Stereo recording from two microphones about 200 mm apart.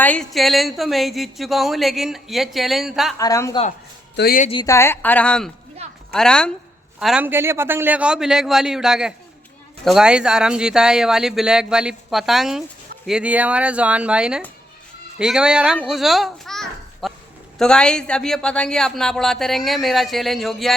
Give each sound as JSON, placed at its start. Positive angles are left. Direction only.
{"t": 0.0, "sound": "speech", "side_deg": 5}
{"t": 3.2, "sound": "speech", "side_deg": 15}
{"t": 4.2, "sound": "speech", "side_deg": 50}
{"t": 4.6, "sound": "a woman's voice", "side_deg": 15}